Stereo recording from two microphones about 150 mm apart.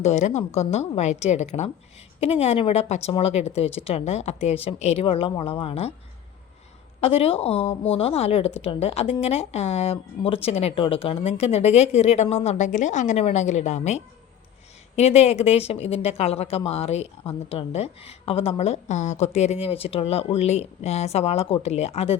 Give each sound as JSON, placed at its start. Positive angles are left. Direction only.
{"t": 0.0, "sound": "speech", "side_deg": 50}
{"t": 7.0, "sound": "speech", "side_deg": 40}